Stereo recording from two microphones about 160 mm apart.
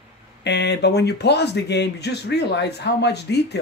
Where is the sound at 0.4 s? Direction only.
90° left.